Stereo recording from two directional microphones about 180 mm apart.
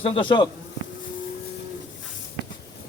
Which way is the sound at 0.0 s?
30° left (ahead or behind).